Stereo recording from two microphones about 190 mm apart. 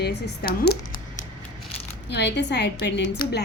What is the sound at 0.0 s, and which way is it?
Speech, 55° left (ahead or behind).